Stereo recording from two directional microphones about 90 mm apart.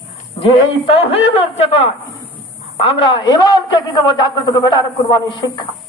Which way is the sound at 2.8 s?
70° left (ahead or behind).